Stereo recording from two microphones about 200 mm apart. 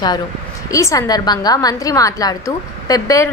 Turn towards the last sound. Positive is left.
turn(degrees=15)  # may be behind; listen again after turning